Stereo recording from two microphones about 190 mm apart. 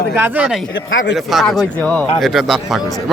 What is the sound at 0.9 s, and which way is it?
Speech, 70° left (ahead or behind).